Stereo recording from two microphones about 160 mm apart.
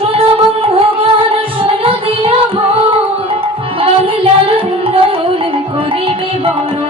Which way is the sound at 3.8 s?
35° right (ahead or behind).